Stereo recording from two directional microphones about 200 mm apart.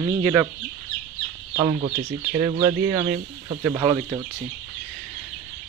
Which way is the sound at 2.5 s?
20° right (ahead or behind).